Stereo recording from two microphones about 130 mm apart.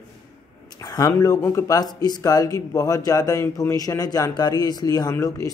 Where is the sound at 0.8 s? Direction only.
30° left (ahead or behind).